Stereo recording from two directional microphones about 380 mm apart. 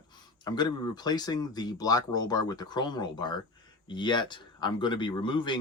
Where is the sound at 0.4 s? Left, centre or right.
Centre.